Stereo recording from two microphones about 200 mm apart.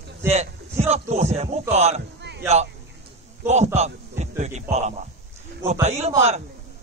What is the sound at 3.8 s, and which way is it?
Speech, 35° right (ahead or behind).